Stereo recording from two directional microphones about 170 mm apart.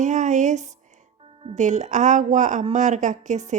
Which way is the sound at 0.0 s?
45° right (ahead or behind).